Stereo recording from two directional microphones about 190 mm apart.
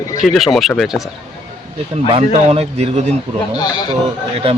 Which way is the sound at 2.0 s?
30° right (ahead or behind).